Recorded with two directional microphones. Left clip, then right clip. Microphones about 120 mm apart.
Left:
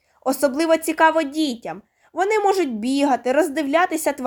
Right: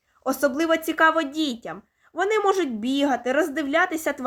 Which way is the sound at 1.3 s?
90° left.